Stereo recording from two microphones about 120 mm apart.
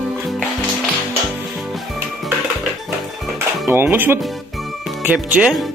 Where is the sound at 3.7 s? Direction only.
20° right (ahead or behind).